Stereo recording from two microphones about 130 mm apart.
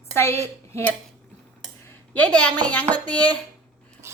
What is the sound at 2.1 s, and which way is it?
A woman's voice, 10° left (ahead or behind).